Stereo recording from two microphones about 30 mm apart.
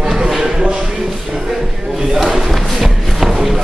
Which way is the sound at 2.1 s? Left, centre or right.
Centre.